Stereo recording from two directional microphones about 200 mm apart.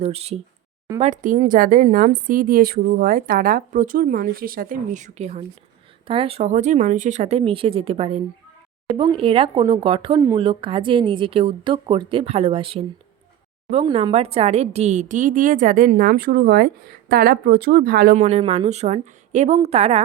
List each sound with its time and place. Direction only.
0.0 s a woman's voice: 30° right (ahead or behind); by 18.2 s 50° right (ahead or behind)
18.2 s a woman's voice: 35° right (ahead or behind)